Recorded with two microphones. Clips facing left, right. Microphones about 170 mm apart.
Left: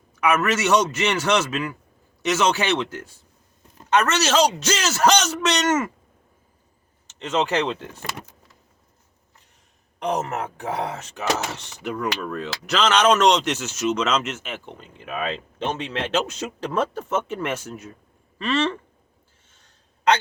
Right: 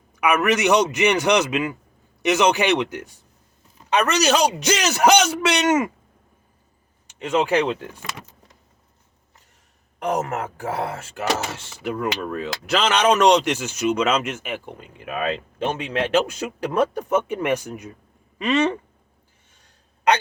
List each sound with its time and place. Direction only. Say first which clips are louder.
0.2 s speech: right 2 dB; 15° right (ahead or behind)
7.1 s speech: right 3 dB; 10° right (ahead or behind)
10.0 s speech: right 1 dB; 10° right (ahead or behind)